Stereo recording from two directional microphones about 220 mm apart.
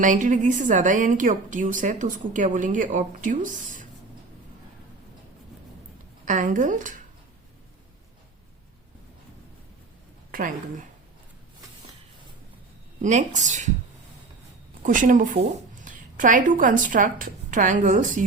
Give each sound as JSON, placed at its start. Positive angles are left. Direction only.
{"t": 0.0, "sound": "a woman's voice", "side_deg": -35}
{"t": 6.2, "sound": "a woman's voice", "side_deg": -35}
{"t": 10.3, "sound": "a woman's voice", "side_deg": -40}
{"t": 13.0, "sound": "a woman's voice", "side_deg": -35}
{"t": 14.8, "sound": "a woman's voice", "side_deg": -35}